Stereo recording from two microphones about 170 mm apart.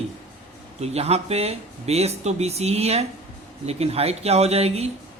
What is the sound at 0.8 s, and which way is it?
Speech, 40° right (ahead or behind).